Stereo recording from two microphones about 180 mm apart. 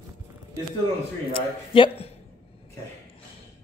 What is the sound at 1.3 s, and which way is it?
Speech, 30° left (ahead or behind).